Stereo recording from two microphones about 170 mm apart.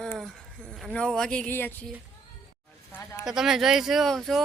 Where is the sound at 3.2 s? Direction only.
5° right (ahead or behind).